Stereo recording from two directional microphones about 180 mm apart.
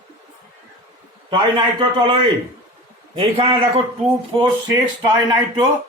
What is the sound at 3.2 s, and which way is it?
Speech, 30° right (ahead or behind).